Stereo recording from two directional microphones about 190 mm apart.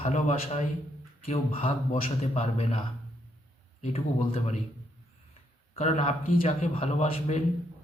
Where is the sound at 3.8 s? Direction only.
35° left (ahead or behind).